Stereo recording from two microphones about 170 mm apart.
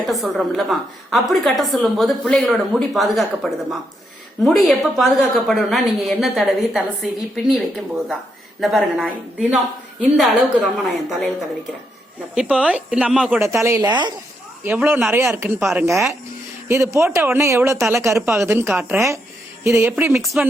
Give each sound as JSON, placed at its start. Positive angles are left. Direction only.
{"t": 0.1, "sound": "a woman's voice", "side_deg": 0}
{"t": 12.3, "sound": "speech", "side_deg": -5}
{"t": 14.6, "sound": "speech", "side_deg": -10}
{"t": 15.6, "sound": "a woman's voice", "side_deg": 0}
{"t": 16.6, "sound": "speech", "side_deg": -15}
{"t": 20.1, "sound": "a woman's voice", "side_deg": 0}